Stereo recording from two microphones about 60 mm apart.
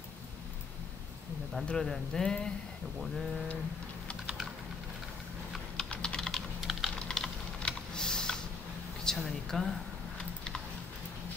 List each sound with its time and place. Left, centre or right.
1.7 s speech: centre
5.8 s typing: centre
6.6 s typing: centre
7.0 s typing: centre
9.0 s speech: centre